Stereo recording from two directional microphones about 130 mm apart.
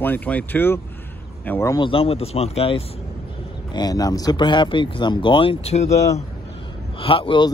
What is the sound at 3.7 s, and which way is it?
Speech, 30° left (ahead or behind).